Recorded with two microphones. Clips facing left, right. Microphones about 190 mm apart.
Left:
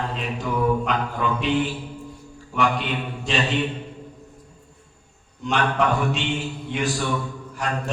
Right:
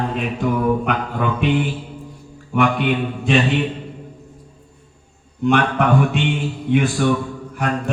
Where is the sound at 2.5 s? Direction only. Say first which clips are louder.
Right 6 dB; 55° right (ahead or behind).